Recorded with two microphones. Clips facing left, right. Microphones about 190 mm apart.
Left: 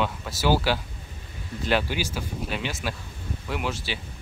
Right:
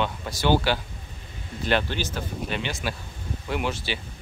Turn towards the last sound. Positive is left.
turn(degrees=0)  # may be behind; listen again after turning